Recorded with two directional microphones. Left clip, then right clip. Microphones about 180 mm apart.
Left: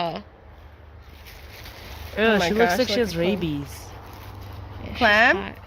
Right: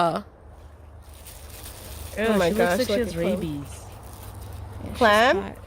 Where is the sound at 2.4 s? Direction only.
60° right (ahead or behind).